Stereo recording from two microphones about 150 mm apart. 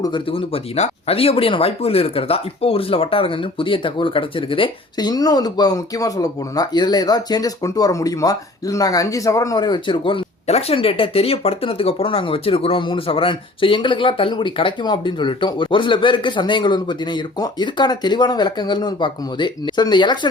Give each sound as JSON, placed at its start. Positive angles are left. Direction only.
{"t": 0.0, "sound": "speech", "side_deg": 35}